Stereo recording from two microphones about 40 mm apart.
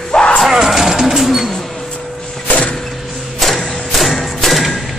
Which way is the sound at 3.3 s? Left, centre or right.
Centre.